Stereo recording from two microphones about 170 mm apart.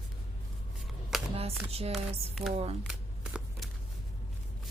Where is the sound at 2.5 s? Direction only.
35° right (ahead or behind).